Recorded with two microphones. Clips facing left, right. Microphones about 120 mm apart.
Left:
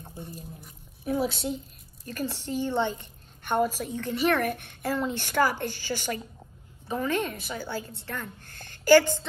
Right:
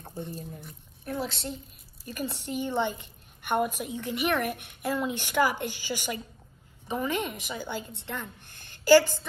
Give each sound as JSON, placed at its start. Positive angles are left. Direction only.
{"t": 0.2, "sound": "a woman's voice", "side_deg": 10}
{"t": 2.0, "sound": "a woman's voice", "side_deg": -15}